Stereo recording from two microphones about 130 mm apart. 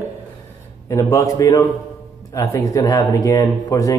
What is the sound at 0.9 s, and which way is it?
Speech, 25° left (ahead or behind).